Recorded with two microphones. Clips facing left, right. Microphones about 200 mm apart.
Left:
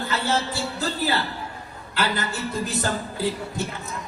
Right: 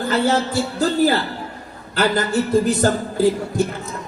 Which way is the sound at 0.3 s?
45° right (ahead or behind).